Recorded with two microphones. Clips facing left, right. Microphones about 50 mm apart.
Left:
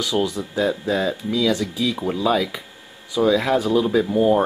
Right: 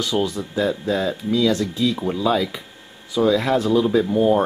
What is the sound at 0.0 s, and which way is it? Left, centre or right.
Speech, centre.